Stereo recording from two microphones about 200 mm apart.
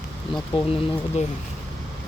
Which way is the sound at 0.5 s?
30° left (ahead or behind).